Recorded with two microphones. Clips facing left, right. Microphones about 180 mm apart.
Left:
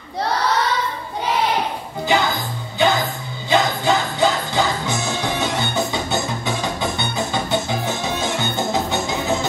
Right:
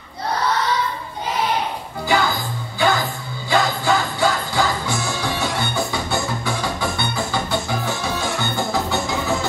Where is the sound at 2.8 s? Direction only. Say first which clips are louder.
Left 1 dB; 20° left (ahead or behind).